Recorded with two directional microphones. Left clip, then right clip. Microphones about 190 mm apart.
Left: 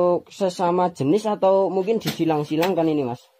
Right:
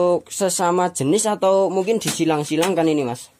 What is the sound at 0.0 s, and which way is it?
Speech, 20° right (ahead or behind).